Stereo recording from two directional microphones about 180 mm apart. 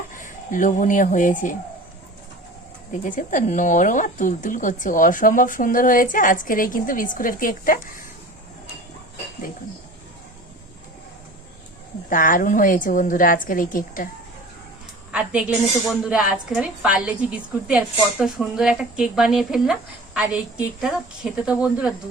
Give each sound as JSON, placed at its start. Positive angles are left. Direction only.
{"t": 0.1, "sound": "speech", "side_deg": 45}
{"t": 3.0, "sound": "speech", "side_deg": 45}
{"t": 12.0, "sound": "speech", "side_deg": 50}
{"t": 15.1, "sound": "a woman's voice", "side_deg": -5}